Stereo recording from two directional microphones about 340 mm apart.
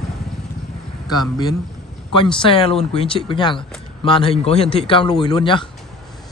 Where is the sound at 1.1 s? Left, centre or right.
Centre.